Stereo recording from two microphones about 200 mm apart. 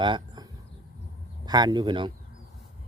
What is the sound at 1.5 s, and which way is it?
Speech, 20° right (ahead or behind).